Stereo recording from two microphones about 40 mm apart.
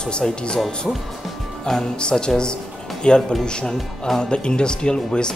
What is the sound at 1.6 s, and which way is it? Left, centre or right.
Speech, centre.